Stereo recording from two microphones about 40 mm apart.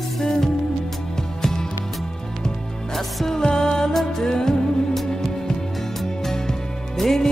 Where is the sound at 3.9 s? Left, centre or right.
Centre.